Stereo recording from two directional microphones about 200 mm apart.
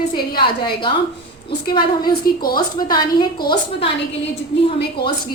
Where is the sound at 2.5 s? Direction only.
20° left (ahead or behind).